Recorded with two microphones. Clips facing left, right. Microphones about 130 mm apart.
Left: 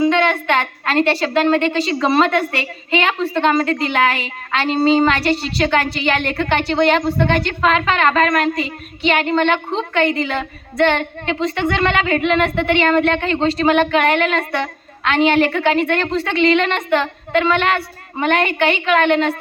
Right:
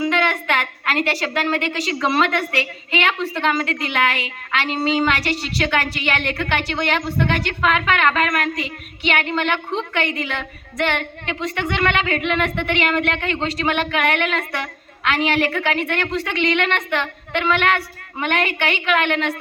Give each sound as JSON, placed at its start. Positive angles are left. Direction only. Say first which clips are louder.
{"t": 0.0, "sound": "a woman's voice", "louder": "left 5 dB", "side_deg": 25}